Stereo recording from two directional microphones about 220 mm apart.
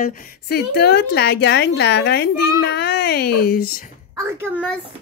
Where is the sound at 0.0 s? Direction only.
40° left (ahead or behind).